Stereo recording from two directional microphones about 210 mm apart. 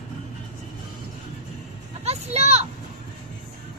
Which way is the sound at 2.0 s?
30° right (ahead or behind).